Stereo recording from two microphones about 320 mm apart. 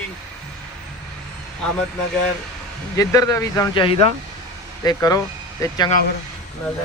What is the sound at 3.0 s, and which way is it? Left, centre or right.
A man's voice, centre.